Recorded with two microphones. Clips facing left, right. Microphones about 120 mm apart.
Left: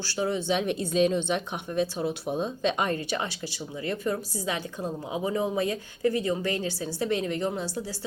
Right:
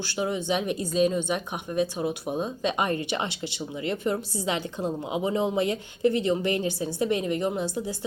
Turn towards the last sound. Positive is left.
turn(degrees=-20)  # may be behind; listen again after turning